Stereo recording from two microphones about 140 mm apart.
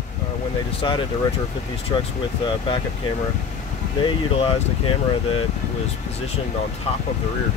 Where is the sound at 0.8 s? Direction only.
35° left (ahead or behind).